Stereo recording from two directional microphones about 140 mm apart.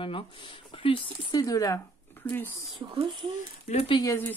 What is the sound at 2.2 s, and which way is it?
Speech, 15° left (ahead or behind).